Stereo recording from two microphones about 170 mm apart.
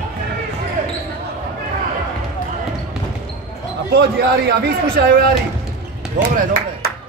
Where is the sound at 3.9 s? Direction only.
70° right (ahead or behind).